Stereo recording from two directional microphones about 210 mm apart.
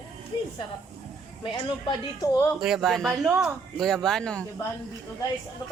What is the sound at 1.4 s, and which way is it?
Speech, 20° left (ahead or behind).